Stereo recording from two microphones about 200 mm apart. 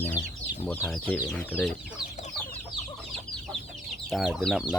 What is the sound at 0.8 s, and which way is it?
Speech, 5° right (ahead or behind).